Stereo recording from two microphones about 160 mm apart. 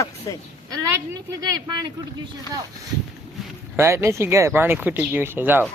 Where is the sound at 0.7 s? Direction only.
20° right (ahead or behind).